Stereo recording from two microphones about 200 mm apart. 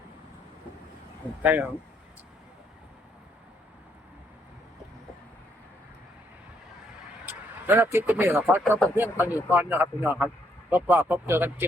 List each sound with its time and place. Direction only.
1.4 s speech: 10° right (ahead or behind)
7.3 s speech: 10° right (ahead or behind)